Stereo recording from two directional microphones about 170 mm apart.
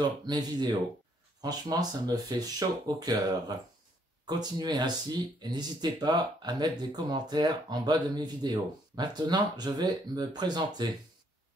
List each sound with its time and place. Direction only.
0.0 s speech: 25° right (ahead or behind)